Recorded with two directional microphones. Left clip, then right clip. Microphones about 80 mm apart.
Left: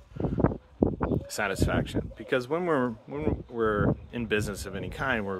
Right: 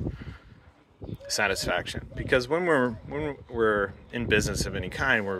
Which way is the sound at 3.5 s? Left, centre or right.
Left.